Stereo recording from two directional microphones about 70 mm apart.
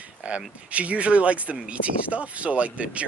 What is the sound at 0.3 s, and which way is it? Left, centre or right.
Speech, centre.